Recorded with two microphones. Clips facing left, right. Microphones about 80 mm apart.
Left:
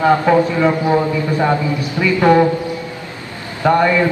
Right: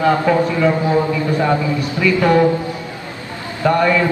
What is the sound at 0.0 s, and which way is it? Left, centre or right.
A man's voice, left.